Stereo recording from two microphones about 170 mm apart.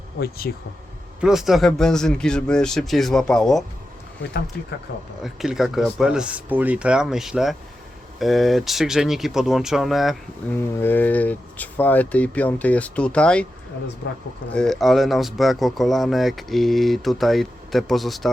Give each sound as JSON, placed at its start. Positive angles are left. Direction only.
{"t": 0.2, "sound": "speech", "side_deg": 65}
{"t": 1.2, "sound": "speech", "side_deg": 0}
{"t": 5.2, "sound": "speech", "side_deg": 0}
{"t": 10.5, "sound": "speech", "side_deg": 10}
{"t": 14.5, "sound": "speech", "side_deg": 5}